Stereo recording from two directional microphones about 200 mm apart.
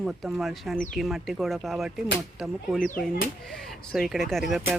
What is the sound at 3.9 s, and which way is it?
Speech, centre (ahead or behind).